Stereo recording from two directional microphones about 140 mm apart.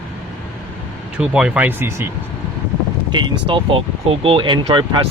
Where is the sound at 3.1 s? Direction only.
35° right (ahead or behind).